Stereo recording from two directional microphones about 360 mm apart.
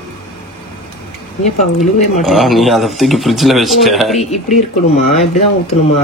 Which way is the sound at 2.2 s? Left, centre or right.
Centre.